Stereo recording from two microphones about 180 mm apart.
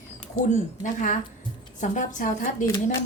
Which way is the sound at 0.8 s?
45° left (ahead or behind).